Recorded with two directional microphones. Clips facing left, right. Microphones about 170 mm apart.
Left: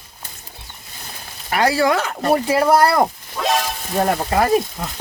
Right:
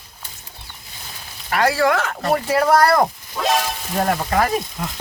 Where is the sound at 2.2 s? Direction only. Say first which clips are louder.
Left 2 dB; 25° left (ahead or behind).